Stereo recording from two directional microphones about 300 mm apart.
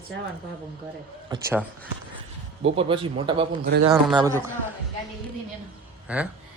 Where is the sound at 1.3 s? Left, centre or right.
Centre.